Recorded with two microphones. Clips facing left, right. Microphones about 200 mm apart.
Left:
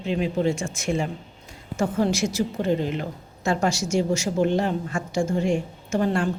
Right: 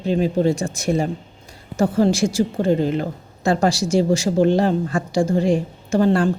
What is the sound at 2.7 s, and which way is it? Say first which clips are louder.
Speech: right 5 dB; 40° right (ahead or behind).